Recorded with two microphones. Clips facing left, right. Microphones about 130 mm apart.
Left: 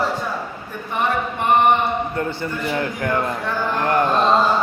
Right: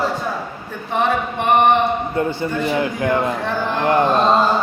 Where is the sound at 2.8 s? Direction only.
25° right (ahead or behind).